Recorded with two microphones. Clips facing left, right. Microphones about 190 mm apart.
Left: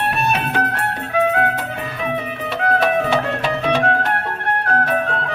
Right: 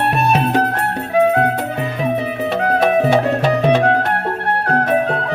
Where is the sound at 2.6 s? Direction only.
40° right (ahead or behind).